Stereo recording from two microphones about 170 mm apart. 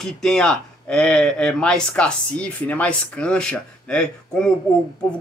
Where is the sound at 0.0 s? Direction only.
5° left (ahead or behind).